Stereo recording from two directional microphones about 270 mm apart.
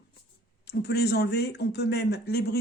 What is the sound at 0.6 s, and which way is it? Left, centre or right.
Speech, left.